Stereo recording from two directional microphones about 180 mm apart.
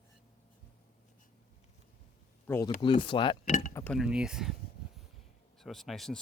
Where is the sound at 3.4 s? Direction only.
45° left (ahead or behind).